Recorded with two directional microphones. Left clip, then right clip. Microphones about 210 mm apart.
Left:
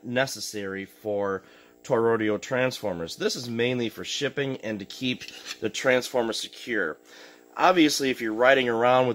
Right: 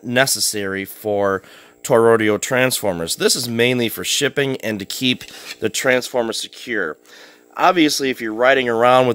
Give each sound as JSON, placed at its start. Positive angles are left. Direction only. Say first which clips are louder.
{"t": 0.1, "sound": "speech", "louder": "right 10 dB", "side_deg": -50}